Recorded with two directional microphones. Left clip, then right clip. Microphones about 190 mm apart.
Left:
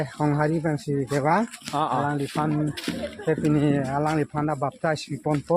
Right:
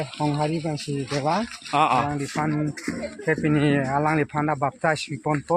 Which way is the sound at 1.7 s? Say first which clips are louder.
Right 6 dB; 15° right (ahead or behind).